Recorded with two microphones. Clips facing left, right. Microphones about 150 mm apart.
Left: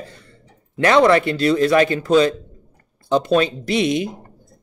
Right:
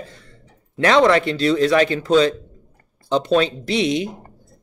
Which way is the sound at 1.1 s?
50° left (ahead or behind).